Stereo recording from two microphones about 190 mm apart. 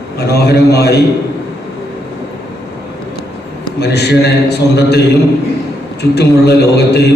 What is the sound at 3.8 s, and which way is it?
A man's voice, 60° left (ahead or behind).